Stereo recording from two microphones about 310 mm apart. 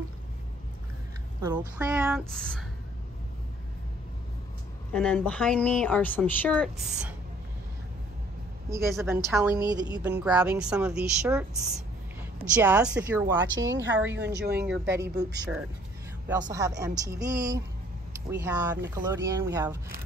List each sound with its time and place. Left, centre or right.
1.8 s speech: centre
4.9 s speech: centre
8.6 s a woman's voice: centre
14.0 s speech: right
14.6 s a woman's voice: centre
18.9 s a woman's voice: centre